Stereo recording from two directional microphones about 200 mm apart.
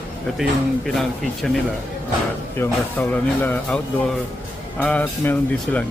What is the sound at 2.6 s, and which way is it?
Speech, 10° left (ahead or behind).